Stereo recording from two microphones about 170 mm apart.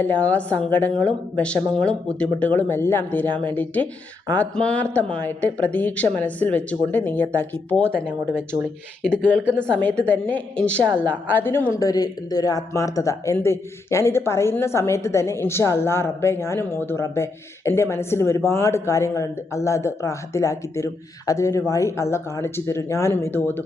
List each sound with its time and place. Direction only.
0.0 s speech: 10° left (ahead or behind)
9.0 s speech: 5° left (ahead or behind)